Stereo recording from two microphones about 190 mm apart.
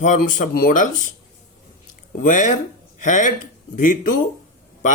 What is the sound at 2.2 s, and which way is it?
Speech, 40° left (ahead or behind).